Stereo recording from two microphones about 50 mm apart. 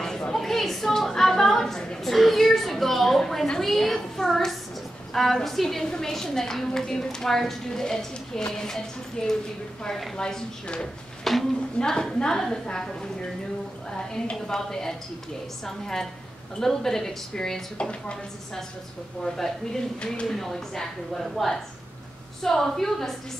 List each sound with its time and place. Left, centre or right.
0.2 s a sound: centre
2.1 s a woman's voice: centre
17.7 s a woman's voice: left
19.2 s a woman's voice: centre
20.0 s a woman's voice: left
20.2 s a woman's voice: centre